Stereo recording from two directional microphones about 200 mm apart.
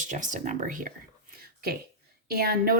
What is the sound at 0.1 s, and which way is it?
Speech, 40° right (ahead or behind).